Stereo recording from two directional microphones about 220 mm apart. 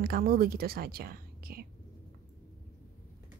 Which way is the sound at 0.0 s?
40° right (ahead or behind).